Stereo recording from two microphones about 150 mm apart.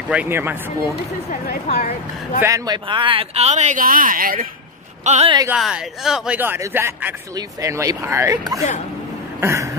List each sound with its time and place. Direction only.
0.1 s speech: 10° right (ahead or behind)
1.3 s a woman's voice: 60° left (ahead or behind)
2.4 s speech: 25° right (ahead or behind); by 3.8 s 50° right (ahead or behind)
3.8 s speech: 70° right (ahead or behind)
5.0 s speech: 50° right (ahead or behind)
5.5 s speech: 5° right (ahead or behind); by 8.6 s 20° right (ahead or behind)
9.4 s a sound: 20° right (ahead or behind)